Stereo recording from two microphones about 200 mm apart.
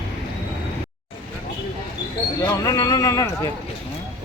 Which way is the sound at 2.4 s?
15° left (ahead or behind).